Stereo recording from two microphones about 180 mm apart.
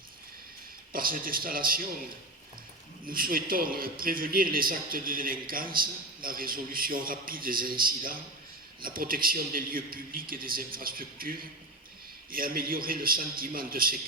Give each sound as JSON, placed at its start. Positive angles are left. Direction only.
{"t": 0.9, "sound": "a man's voice", "side_deg": -50}
{"t": 3.1, "sound": "a man's voice", "side_deg": -55}